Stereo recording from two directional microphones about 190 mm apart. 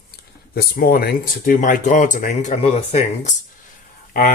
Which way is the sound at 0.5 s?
50° left (ahead or behind).